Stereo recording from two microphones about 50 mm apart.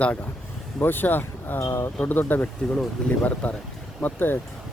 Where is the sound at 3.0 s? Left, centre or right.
Centre.